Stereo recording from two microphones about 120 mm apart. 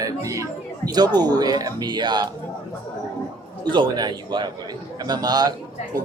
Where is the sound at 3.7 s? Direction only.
40° right (ahead or behind).